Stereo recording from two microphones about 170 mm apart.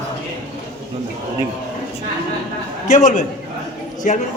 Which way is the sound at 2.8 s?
50° left (ahead or behind).